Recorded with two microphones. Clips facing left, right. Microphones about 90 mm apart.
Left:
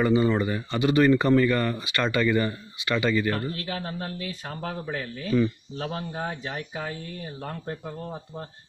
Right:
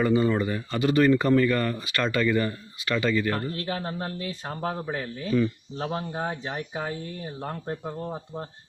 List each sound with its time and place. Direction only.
0.0 s speech: 5° left (ahead or behind)
3.5 s speech: 30° right (ahead or behind)